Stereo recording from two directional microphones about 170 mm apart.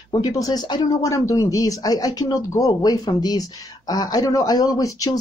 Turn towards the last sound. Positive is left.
turn(degrees=20)  # may be behind; listen again after turning